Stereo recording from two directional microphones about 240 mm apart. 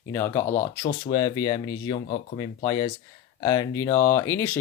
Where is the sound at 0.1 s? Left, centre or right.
Centre.